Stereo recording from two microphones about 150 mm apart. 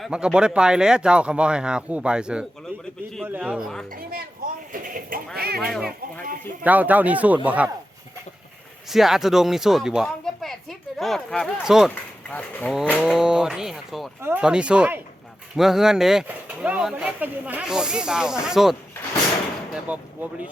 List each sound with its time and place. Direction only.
0.0 s speech: 5° right (ahead or behind)
2.7 s a sound: 15° right (ahead or behind)
3.2 s speech: 10° right (ahead or behind)
4.7 s a sound: 65° right (ahead or behind)
5.5 s speech: centre (ahead or behind)
6.7 s speech: 10° right (ahead or behind)
8.9 s speech: centre (ahead or behind)
12.3 s speech: 10° left (ahead or behind)
13.0 s speech: 5° right (ahead or behind)
14.2 s speech: 15° right (ahead or behind)
19.9 s speech: 10° right (ahead or behind)